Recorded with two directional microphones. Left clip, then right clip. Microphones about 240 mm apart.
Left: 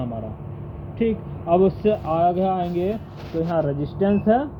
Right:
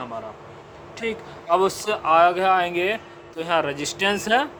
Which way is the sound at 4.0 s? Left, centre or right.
Right.